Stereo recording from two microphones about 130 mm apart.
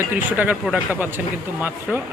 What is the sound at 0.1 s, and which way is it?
Speech, 10° right (ahead or behind).